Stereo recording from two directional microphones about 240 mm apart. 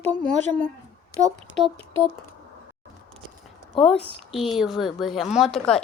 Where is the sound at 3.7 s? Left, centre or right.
Left.